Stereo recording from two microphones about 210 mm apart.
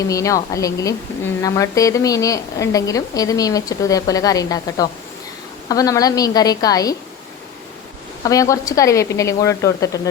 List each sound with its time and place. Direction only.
0.1 s a woman's voice: 15° left (ahead or behind)
8.2 s a woman's voice: 15° left (ahead or behind)